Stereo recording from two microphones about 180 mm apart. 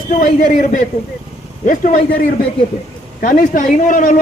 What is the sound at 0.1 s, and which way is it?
A woman's voice, 45° left (ahead or behind).